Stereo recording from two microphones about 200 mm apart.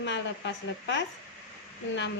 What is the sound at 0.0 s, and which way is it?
A woman's voice, 60° left (ahead or behind).